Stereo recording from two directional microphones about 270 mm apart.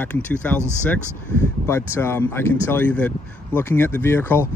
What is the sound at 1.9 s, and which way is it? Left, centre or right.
Speech, centre.